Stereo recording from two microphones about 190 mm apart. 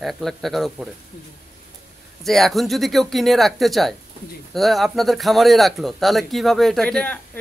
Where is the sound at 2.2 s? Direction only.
Centre (ahead or behind).